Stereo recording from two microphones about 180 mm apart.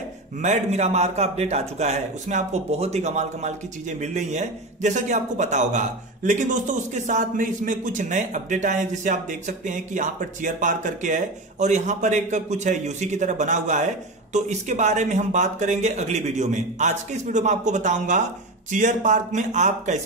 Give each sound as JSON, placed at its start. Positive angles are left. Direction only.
{"t": 0.4, "sound": "a man's voice", "side_deg": -40}